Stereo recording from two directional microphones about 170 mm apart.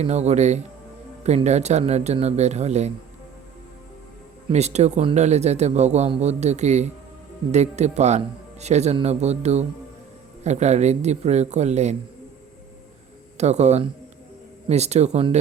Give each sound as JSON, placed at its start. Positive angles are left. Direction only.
{"t": 0.0, "sound": "a man's voice", "side_deg": -40}
{"t": 4.5, "sound": "a man's voice", "side_deg": -40}
{"t": 13.3, "sound": "a man's voice", "side_deg": -40}